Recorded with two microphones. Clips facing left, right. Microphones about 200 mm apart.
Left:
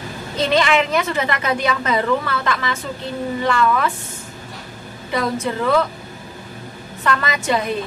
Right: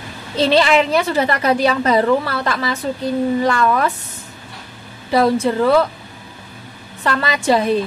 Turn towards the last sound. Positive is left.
turn(degrees=-35)  # may be behind; listen again after turning